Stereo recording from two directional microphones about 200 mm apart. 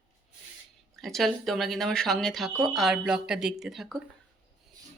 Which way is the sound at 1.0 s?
Centre (ahead or behind).